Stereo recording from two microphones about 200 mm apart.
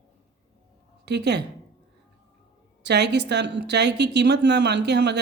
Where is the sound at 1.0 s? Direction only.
55° right (ahead or behind).